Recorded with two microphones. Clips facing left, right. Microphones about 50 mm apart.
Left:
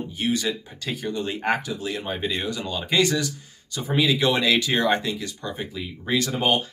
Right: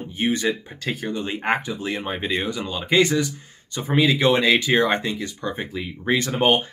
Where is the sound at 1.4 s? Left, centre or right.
Right.